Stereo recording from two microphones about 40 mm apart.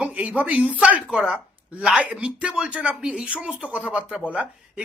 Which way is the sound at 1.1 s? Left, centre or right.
Centre.